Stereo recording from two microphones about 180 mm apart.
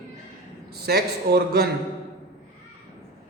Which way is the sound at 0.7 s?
60° right (ahead or behind).